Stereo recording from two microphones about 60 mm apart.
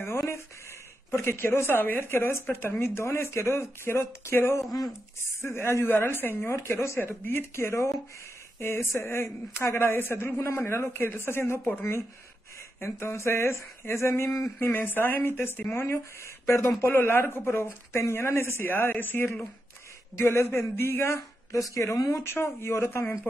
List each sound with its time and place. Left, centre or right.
1.1 s speech: left
7.0 s a man's voice: left
16.8 s a man's voice: left
20.2 s speech: left